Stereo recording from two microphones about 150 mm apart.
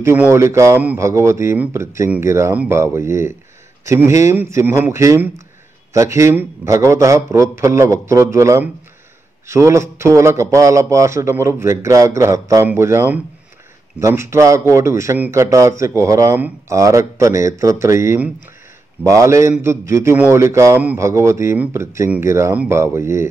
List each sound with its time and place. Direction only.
0.0 s a man's voice: 15° right (ahead or behind)